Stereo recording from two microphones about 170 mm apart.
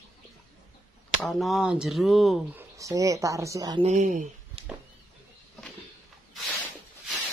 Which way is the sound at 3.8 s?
45° right (ahead or behind).